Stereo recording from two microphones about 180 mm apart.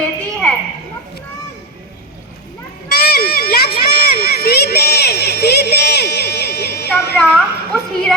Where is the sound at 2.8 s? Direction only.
60° left (ahead or behind).